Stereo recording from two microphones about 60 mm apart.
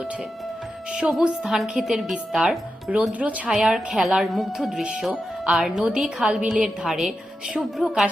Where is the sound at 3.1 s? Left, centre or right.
Right.